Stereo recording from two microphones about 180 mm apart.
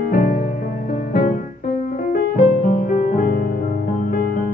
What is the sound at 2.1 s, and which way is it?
Music, 50° left (ahead or behind).